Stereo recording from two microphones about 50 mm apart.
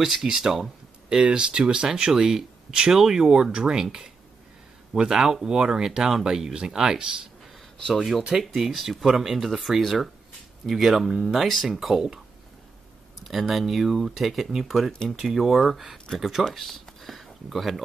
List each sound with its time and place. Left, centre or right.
0.0 s speech: centre
7.9 s speech: centre
13.2 s speech: centre
16.5 s a sound: centre